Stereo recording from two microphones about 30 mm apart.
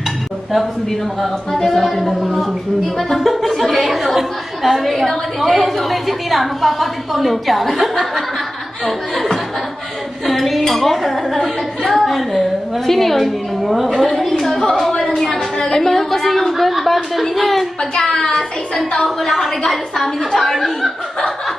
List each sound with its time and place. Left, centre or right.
1.2 s a woman's voice: centre
8.8 s a woman's voice: centre
15.0 s a sound: centre
15.6 s a woman's voice: centre
17.9 s speech: centre
18.3 s a woman's voice: centre